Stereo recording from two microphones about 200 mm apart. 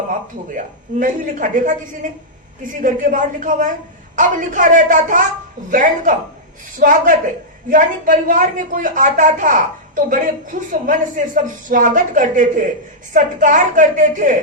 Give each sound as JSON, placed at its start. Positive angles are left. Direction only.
{"t": 0.5, "sound": "a woman's voice", "side_deg": -40}